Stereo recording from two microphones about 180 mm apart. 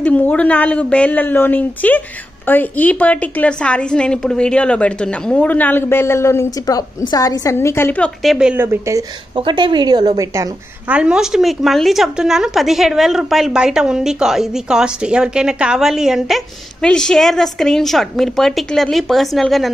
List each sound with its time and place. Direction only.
0.0 s a woman's voice: 10° left (ahead or behind)
9.3 s a woman's voice: 30° right (ahead or behind)
10.9 s speech: 5° right (ahead or behind)